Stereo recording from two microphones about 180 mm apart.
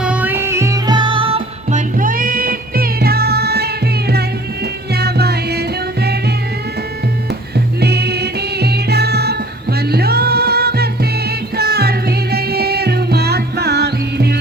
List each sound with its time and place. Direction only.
0.0 s music: 5° right (ahead or behind); by 1.4 s 30° right (ahead or behind)
1.7 s music: 50° right (ahead or behind)
7.8 s music: 65° right (ahead or behind)